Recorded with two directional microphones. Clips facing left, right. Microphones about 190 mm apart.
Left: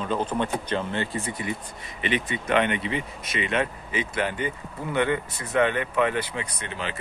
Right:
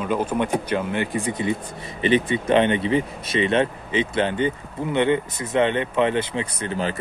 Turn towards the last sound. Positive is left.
turn(degrees=-40)  # may be behind; listen again after turning